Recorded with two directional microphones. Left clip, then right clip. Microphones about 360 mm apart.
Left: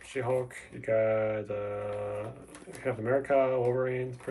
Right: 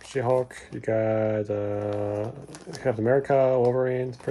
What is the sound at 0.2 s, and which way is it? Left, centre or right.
Speech, right.